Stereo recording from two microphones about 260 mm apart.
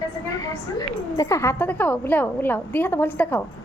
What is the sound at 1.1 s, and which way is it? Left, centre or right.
A woman's voice, centre.